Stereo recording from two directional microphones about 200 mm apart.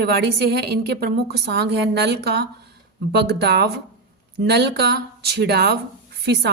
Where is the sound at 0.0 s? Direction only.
50° right (ahead or behind).